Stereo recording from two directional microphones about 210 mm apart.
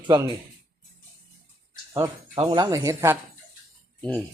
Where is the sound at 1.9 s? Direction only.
20° right (ahead or behind).